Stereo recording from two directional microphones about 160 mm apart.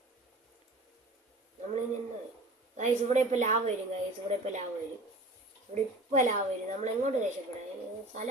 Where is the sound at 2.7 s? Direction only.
45° right (ahead or behind).